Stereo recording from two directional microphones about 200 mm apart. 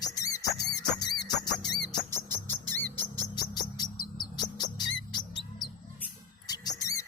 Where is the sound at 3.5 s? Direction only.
20° left (ahead or behind).